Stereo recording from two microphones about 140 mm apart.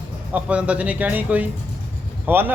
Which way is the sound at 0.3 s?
10° right (ahead or behind).